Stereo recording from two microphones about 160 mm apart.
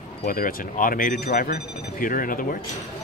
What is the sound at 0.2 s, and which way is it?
A man's voice, 60° left (ahead or behind).